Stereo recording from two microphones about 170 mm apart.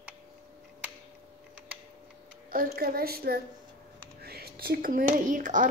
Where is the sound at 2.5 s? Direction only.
60° right (ahead or behind).